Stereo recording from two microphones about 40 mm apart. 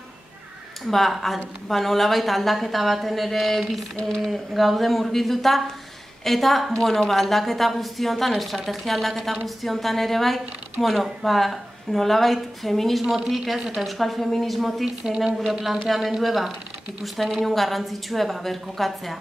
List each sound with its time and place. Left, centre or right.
0.8 s a woman's voice: centre
3.9 s speech: centre
4.3 s a woman's voice: centre
15.0 s speech: centre
15.9 s a woman's voice: centre